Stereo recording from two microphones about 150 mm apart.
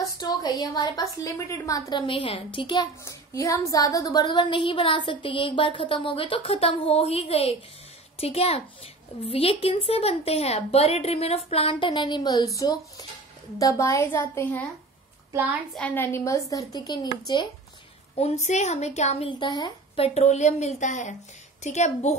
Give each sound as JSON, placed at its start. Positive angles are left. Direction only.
{"t": 0.0, "sound": "a woman's voice", "side_deg": 25}
{"t": 3.1, "sound": "a woman's voice", "side_deg": 20}
{"t": 15.3, "sound": "a child's voice", "side_deg": -10}
{"t": 15.7, "sound": "a woman's voice", "side_deg": 10}
{"t": 18.1, "sound": "a woman's voice", "side_deg": 45}
{"t": 19.2, "sound": "a woman's voice", "side_deg": 30}
{"t": 20.2, "sound": "a woman's voice", "side_deg": 50}